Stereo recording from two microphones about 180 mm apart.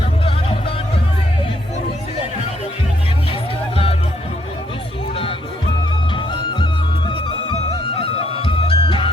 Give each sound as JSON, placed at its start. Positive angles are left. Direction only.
{"t": 0.3, "sound": "music", "side_deg": 35}
{"t": 6.1, "sound": "music", "side_deg": 25}